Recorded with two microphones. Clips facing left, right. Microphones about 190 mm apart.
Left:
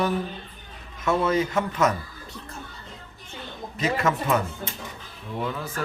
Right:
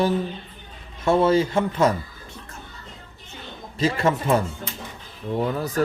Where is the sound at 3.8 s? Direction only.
30° right (ahead or behind).